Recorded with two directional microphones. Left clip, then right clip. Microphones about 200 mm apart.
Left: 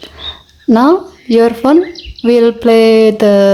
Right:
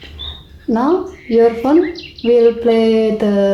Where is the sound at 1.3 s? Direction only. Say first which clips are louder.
Left 3 dB; 40° left (ahead or behind).